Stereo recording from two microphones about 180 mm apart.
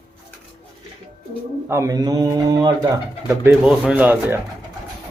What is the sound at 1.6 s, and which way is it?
Speech, 15° right (ahead or behind).